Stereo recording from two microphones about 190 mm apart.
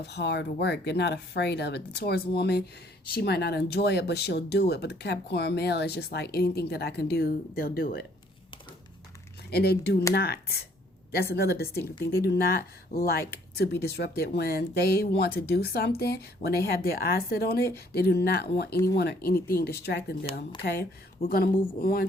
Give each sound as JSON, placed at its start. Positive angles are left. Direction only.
{"t": 0.0, "sound": "speech", "side_deg": 65}
{"t": 9.5, "sound": "speech", "side_deg": 55}
{"t": 21.2, "sound": "speech", "side_deg": 50}